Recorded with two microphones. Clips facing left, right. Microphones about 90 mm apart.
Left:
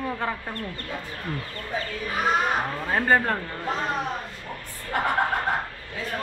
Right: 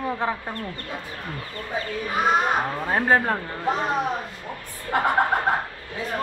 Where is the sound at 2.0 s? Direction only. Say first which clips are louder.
Right 3 dB; 15° right (ahead or behind).